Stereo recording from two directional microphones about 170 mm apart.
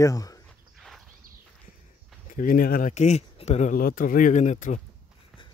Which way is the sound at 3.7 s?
55° left (ahead or behind).